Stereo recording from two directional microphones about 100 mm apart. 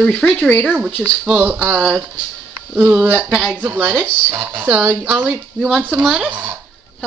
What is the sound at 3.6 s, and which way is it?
A woman's voice, 15° right (ahead or behind).